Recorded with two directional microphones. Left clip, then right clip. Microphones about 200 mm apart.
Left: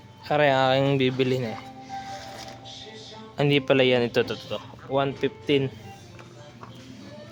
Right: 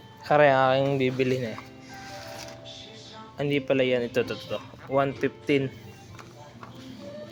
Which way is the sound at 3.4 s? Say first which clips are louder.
Left 4 dB; 20° left (ahead or behind).